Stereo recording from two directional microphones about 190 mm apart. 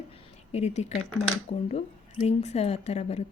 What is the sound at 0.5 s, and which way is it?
A woman's voice, 35° left (ahead or behind).